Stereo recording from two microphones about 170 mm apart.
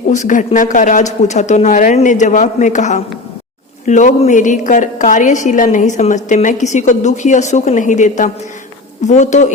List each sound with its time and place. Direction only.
0.1 s a woman's voice: 45° left (ahead or behind)